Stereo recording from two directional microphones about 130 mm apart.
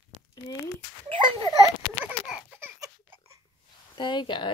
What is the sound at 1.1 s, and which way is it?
Speech, 40° right (ahead or behind).